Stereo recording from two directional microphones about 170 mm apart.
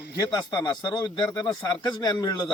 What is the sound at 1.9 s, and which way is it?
Speech, 25° left (ahead or behind).